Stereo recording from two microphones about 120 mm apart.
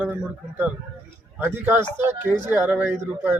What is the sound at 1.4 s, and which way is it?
Speech, 15° right (ahead or behind).